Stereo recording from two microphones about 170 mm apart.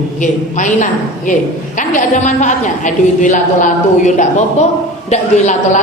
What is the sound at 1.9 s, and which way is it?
A woman's voice, 45° left (ahead or behind).